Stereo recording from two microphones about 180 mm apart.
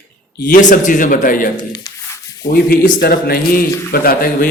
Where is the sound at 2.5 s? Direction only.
60° left (ahead or behind).